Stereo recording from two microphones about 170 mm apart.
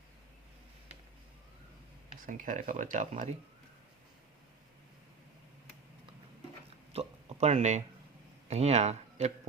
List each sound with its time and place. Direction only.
2.2 s speech: 50° right (ahead or behind)
6.9 s a sound: 35° right (ahead or behind)
8.4 s speech: 40° right (ahead or behind)